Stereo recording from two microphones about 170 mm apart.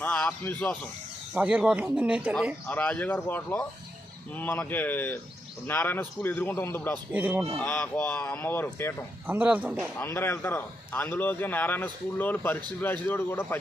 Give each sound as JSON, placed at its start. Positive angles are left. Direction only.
{"t": 0.0, "sound": "a man's voice", "side_deg": 10}
{"t": 1.3, "sound": "speech", "side_deg": -10}
{"t": 2.6, "sound": "a man's voice", "side_deg": 10}
{"t": 7.1, "sound": "speech", "side_deg": -10}
{"t": 7.6, "sound": "a man's voice", "side_deg": 10}
{"t": 9.2, "sound": "speech", "side_deg": -10}
{"t": 10.0, "sound": "a man's voice", "side_deg": 15}